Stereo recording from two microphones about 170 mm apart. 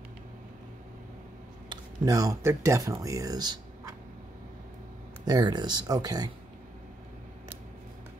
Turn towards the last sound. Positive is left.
turn(degrees=-25)  # may be behind; listen again after turning